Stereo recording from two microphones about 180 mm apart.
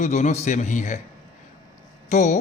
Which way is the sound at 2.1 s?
40° left (ahead or behind).